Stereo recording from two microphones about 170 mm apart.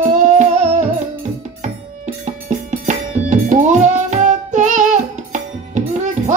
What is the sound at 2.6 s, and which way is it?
Music, 45° right (ahead or behind).